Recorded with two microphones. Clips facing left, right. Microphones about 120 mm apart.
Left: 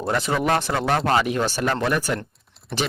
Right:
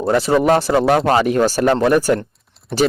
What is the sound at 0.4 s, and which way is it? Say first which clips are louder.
Speech: right 8 dB; 35° right (ahead or behind).